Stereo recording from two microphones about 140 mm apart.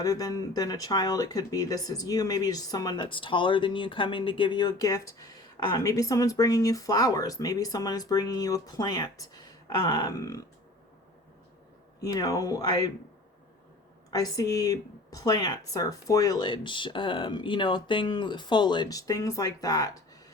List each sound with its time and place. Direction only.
0.0 s speech: 25° left (ahead or behind)
12.0 s speech: 25° left (ahead or behind)
14.1 s speech: 30° left (ahead or behind)